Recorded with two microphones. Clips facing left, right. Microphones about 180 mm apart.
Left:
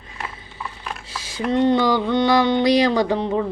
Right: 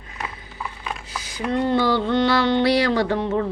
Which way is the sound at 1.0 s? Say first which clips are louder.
Left 4 dB; 25° left (ahead or behind).